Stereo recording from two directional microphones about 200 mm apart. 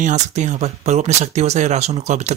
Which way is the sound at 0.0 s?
35° right (ahead or behind).